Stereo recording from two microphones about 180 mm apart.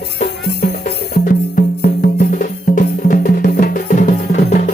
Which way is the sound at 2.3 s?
50° left (ahead or behind).